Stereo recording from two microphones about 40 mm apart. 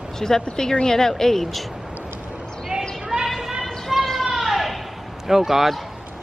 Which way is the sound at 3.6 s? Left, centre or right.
Centre.